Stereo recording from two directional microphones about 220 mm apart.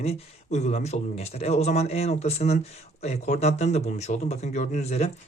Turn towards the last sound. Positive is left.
turn(degrees=30)  # may be behind; listen again after turning